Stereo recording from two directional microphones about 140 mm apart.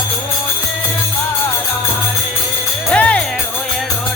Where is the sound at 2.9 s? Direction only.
10° left (ahead or behind).